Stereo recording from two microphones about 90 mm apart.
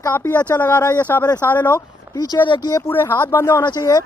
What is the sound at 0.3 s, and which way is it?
Speech, 20° left (ahead or behind).